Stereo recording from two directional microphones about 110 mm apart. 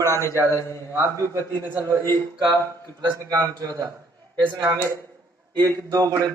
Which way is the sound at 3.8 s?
40° right (ahead or behind).